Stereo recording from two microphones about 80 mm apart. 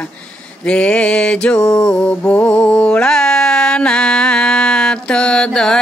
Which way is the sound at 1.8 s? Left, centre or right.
Centre.